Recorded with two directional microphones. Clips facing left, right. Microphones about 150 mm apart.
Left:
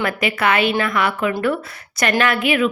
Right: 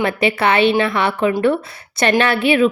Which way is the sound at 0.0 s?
30° right (ahead or behind).